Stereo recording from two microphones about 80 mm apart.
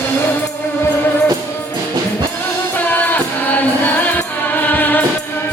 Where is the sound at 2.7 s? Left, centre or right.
Left.